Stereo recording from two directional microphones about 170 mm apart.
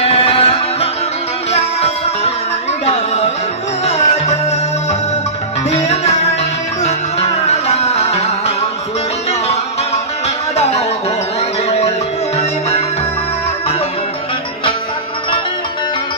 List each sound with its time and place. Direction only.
0.0 s music: 35° left (ahead or behind)
5.7 s music: 40° left (ahead or behind)